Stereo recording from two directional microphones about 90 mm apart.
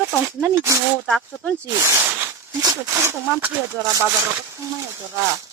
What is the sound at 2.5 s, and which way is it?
Speech, 45° right (ahead or behind).